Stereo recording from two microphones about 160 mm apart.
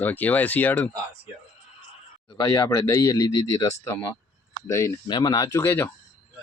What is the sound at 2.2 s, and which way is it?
Speech, 30° left (ahead or behind).